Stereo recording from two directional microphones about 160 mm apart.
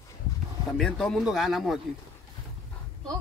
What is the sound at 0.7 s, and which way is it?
Speech, 5° left (ahead or behind).